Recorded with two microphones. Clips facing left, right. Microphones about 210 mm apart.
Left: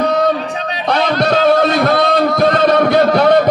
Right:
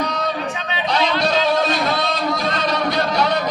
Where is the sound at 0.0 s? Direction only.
55° left (ahead or behind).